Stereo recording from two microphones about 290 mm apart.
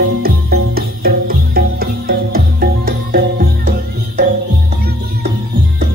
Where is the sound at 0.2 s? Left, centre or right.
Right.